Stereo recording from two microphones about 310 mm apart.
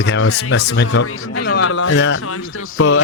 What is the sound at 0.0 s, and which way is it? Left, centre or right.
Speech, left.